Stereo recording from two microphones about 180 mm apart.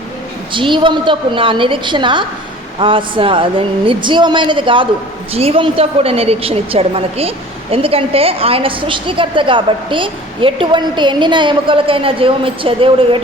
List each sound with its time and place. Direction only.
0.5 s a woman's voice: 25° right (ahead or behind)